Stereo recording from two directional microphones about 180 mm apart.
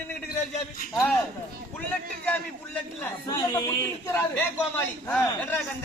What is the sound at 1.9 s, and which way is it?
A man's voice, 10° left (ahead or behind).